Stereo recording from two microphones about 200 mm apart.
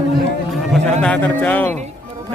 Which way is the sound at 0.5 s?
5° left (ahead or behind).